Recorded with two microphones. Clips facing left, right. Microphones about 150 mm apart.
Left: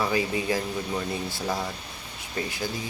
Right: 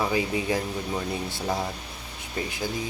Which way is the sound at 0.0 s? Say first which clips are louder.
Even; 15° right (ahead or behind).